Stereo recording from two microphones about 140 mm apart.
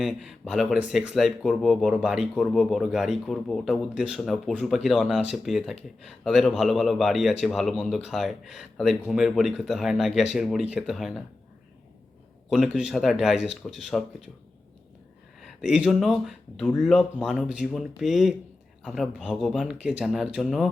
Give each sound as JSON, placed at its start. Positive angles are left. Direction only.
{"t": 0.0, "sound": "speech", "side_deg": -5}
{"t": 12.5, "sound": "speech", "side_deg": -5}
{"t": 15.6, "sound": "speech", "side_deg": -5}